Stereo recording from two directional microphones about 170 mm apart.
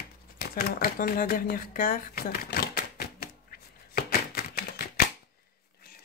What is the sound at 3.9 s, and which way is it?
Chopping, 60° left (ahead or behind).